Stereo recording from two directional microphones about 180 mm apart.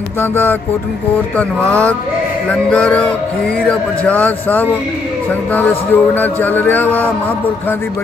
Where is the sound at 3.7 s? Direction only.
10° left (ahead or behind).